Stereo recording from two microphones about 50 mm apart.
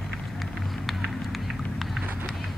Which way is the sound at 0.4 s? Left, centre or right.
Centre.